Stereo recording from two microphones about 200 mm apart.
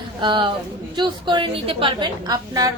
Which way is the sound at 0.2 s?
25° right (ahead or behind).